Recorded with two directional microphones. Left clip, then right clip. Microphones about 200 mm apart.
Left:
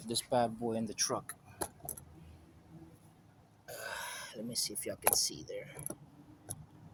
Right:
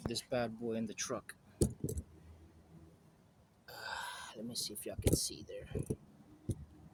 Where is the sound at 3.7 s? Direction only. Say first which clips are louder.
Left 1 dB; 10° right (ahead or behind).